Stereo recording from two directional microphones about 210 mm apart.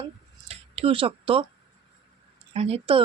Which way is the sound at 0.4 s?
30° right (ahead or behind).